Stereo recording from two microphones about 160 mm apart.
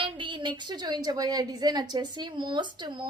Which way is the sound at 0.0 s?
30° right (ahead or behind).